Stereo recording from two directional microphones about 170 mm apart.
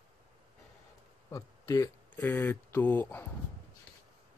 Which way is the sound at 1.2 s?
20° left (ahead or behind).